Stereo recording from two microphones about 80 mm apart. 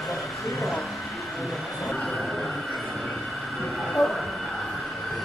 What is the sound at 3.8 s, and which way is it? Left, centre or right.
Train, centre.